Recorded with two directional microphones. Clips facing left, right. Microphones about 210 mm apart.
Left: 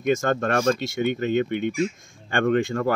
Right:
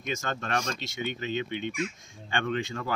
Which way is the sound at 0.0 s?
50° left (ahead or behind).